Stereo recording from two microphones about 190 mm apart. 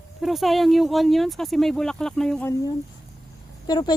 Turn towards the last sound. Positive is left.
turn(degrees=20)  # may be behind; listen again after turning